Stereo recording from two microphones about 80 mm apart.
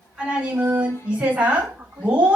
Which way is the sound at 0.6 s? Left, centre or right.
Centre.